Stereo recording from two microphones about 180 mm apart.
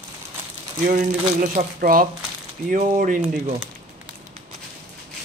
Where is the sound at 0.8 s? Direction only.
45° right (ahead or behind).